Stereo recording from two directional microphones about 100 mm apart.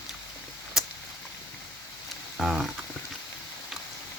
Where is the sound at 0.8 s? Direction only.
5° right (ahead or behind).